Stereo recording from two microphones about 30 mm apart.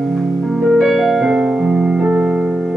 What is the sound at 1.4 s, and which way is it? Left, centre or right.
Music, right.